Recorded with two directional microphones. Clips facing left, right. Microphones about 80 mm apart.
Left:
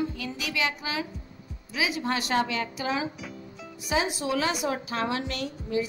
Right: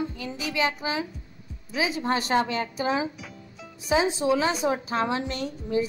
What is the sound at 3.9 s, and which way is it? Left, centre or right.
Speech, right.